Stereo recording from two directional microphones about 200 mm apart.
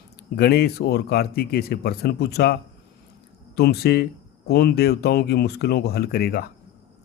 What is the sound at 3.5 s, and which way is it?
Speech, 50° left (ahead or behind).